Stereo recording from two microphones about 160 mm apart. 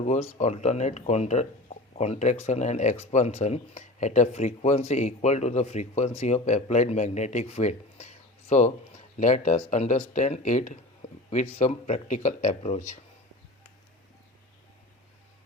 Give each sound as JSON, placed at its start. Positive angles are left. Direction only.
{"t": 0.0, "sound": "speech", "side_deg": 45}